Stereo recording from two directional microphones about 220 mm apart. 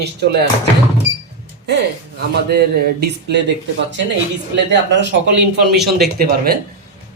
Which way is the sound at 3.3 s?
50° right (ahead or behind).